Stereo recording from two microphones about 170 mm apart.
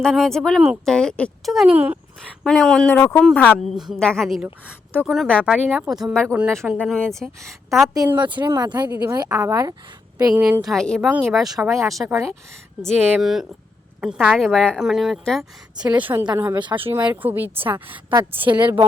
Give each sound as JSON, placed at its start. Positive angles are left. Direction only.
{"t": 0.0, "sound": "speech", "side_deg": 0}
{"t": 2.4, "sound": "speech", "side_deg": 5}
{"t": 5.5, "sound": "speech", "side_deg": -5}
{"t": 7.9, "sound": "a woman's voice", "side_deg": -25}
{"t": 10.4, "sound": "speech", "side_deg": -5}
{"t": 18.1, "sound": "a woman's voice", "side_deg": -30}